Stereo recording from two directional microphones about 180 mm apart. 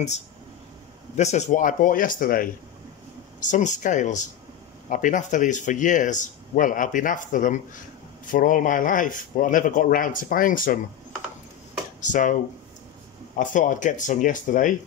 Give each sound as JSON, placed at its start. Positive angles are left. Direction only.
{"t": 1.1, "sound": "speech", "side_deg": 40}
{"t": 12.0, "sound": "speech", "side_deg": 45}
{"t": 13.4, "sound": "speech", "side_deg": 45}